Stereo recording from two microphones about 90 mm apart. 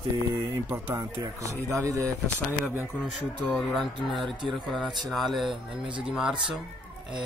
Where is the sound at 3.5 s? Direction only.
Centre (ahead or behind).